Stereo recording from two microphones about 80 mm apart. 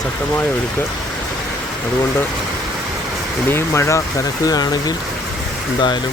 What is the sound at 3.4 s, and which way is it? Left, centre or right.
Speech, left.